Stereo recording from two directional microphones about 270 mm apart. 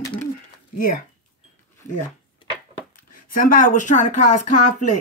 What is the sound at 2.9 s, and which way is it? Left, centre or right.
Speech, left.